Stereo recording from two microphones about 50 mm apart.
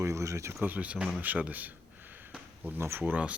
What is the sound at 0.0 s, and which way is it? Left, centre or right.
Speech, right.